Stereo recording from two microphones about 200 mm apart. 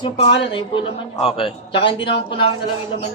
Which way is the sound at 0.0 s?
25° left (ahead or behind).